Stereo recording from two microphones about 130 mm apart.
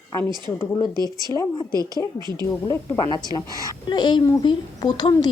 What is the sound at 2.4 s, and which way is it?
Speech, 30° left (ahead or behind).